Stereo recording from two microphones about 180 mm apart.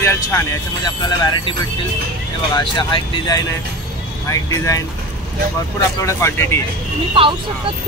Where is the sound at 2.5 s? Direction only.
25° left (ahead or behind).